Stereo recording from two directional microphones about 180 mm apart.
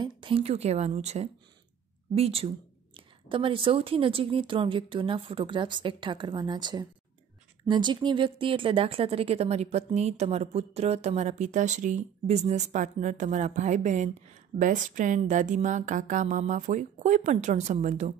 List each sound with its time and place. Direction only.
0.0 s speech: 30° right (ahead or behind)